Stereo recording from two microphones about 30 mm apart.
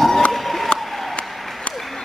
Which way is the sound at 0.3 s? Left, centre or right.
Centre.